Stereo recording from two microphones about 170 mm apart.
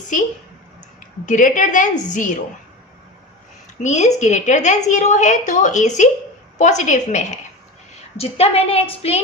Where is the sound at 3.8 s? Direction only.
45° left (ahead or behind).